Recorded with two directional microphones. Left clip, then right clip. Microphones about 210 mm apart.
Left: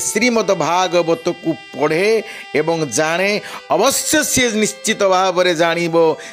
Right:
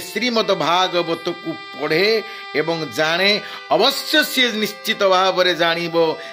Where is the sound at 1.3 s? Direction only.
50° left (ahead or behind).